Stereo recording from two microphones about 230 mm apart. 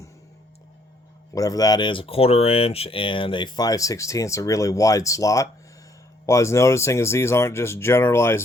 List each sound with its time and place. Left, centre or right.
1.3 s speech: centre